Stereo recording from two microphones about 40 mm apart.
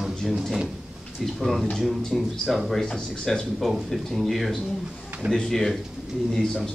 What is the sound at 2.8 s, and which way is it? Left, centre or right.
Speech, centre.